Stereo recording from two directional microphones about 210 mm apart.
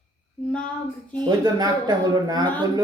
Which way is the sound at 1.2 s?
20° right (ahead or behind).